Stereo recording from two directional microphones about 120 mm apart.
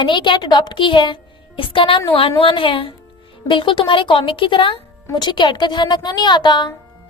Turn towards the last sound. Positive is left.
turn(degrees=40)  # may be behind; listen again after turning